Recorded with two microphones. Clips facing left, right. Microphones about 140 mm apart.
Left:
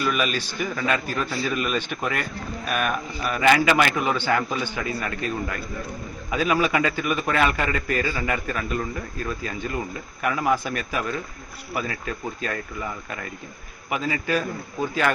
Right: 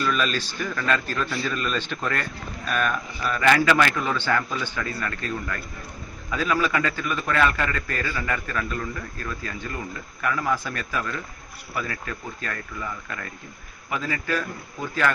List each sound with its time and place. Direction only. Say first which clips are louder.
0.0 s a man's voice: even; 10° left (ahead or behind)
13.9 s a man's voice: left 3 dB; 20° left (ahead or behind)